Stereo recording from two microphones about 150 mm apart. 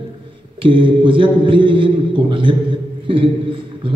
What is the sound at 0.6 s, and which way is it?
A man's voice, 35° right (ahead or behind).